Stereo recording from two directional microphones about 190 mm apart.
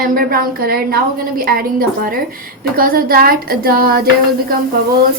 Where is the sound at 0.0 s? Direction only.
50° right (ahead or behind).